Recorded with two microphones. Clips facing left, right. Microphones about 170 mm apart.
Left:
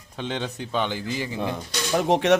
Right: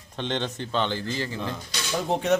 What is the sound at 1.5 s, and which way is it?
Speech, 80° left.